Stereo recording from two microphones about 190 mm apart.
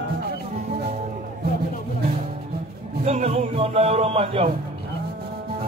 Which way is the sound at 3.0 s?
35° right (ahead or behind).